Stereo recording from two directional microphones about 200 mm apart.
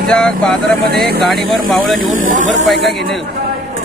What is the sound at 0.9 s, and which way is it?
Speech, 50° right (ahead or behind).